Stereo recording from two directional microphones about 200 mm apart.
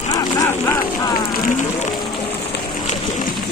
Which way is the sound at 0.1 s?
15° left (ahead or behind).